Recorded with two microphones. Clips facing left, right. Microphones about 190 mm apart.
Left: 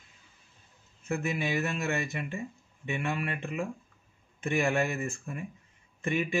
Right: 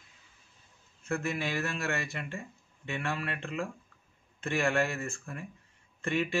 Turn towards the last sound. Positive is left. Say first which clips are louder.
# left 1 dB
turn(degrees=15)  # may be behind; listen again after turning